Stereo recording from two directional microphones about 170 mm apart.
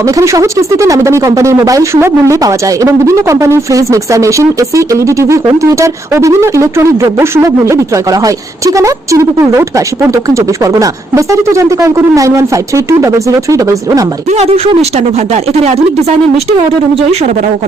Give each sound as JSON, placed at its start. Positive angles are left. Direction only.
{"t": 0.0, "sound": "speech", "side_deg": -20}
{"t": 14.3, "sound": "speech", "side_deg": -40}